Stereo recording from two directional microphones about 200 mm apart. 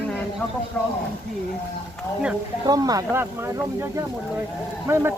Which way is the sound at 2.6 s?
20° right (ahead or behind).